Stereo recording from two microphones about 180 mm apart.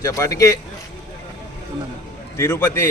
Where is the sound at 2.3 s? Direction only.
15° left (ahead or behind).